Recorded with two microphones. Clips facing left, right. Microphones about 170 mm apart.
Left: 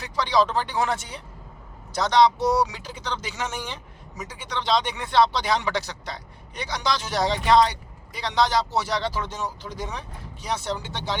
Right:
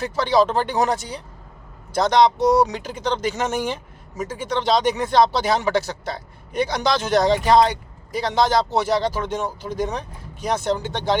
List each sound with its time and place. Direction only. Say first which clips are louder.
0.0 s speech: right 4 dB; 50° right (ahead or behind)
1.9 s speech: right 3 dB; 50° right (ahead or behind)